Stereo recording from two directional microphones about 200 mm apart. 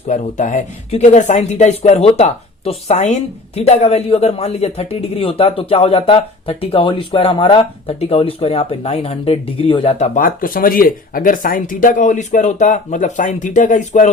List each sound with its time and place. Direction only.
0.1 s speech: 35° left (ahead or behind)
10.2 s speech: 45° left (ahead or behind)